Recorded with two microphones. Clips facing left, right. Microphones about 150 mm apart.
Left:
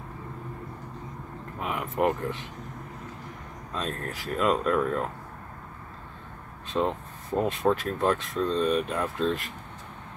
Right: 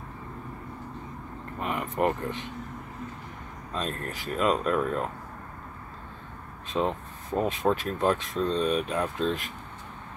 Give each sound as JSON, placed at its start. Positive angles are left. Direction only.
{"t": 1.6, "sound": "speech", "side_deg": 0}
{"t": 3.7, "sound": "speech", "side_deg": 0}
{"t": 6.7, "sound": "speech", "side_deg": 0}